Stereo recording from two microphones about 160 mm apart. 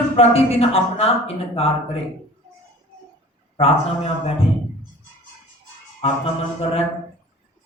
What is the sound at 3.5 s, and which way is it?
Speech, 35° left (ahead or behind).